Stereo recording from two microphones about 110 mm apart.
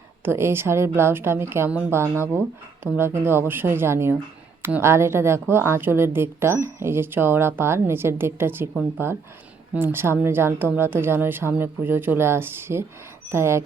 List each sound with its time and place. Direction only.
0.3 s a woman's voice: 25° right (ahead or behind)